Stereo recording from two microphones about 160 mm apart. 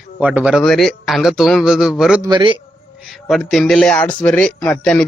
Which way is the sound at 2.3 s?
30° right (ahead or behind).